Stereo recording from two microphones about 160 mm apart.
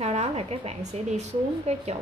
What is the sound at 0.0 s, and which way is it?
A woman's voice, 45° right (ahead or behind).